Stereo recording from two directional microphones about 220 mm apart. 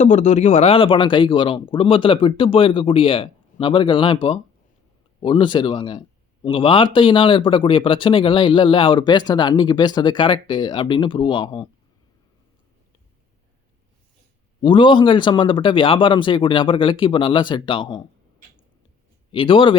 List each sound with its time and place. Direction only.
0.0 s a man's voice: 35° left (ahead or behind)
14.6 s a man's voice: 20° left (ahead or behind)
19.3 s a man's voice: 25° left (ahead or behind)